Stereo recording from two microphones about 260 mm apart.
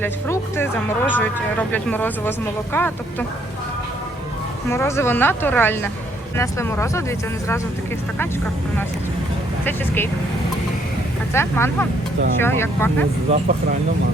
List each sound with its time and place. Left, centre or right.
0.0 s speech: centre
4.7 s speech: centre
9.6 s speech: centre
11.3 s speech: centre
13.3 s speech: right